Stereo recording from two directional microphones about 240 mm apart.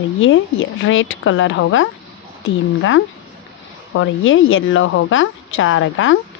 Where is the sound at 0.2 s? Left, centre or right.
Left.